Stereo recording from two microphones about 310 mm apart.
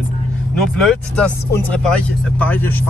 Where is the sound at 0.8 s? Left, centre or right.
Centre.